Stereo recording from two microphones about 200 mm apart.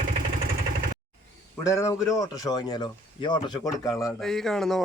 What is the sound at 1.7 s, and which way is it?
A man's voice, 15° left (ahead or behind).